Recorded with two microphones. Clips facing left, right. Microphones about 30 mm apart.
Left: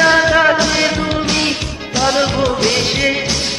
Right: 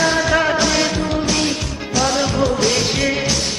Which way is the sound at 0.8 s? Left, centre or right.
Left.